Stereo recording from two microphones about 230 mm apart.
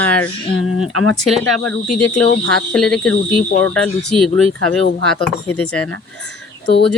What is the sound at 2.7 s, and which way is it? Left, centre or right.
Speech, centre.